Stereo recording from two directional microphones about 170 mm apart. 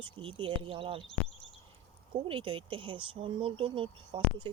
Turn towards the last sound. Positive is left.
turn(degrees=-30)  # may be behind; listen again after turning